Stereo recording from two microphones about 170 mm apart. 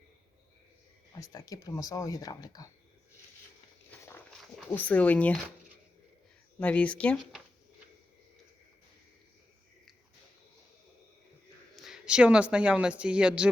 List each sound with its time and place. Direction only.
1.2 s speech: 20° left (ahead or behind)
4.7 s speech: 10° left (ahead or behind)
6.6 s speech: 10° left (ahead or behind)
11.8 s speech: 5° right (ahead or behind)